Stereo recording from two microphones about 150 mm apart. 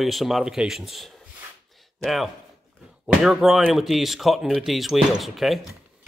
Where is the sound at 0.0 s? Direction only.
Centre (ahead or behind).